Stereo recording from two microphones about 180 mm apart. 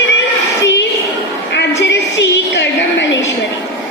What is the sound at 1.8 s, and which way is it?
Music, 80° left.